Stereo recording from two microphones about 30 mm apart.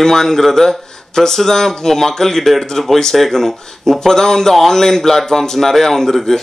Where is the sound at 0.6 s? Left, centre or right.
Centre.